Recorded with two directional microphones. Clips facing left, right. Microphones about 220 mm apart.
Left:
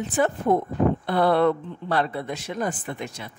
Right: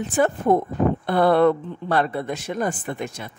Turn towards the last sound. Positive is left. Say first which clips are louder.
# right 3 dB
turn(degrees=-50)  # may be behind; listen again after turning